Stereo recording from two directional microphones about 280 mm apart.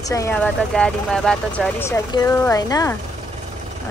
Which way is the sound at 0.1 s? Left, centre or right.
Centre.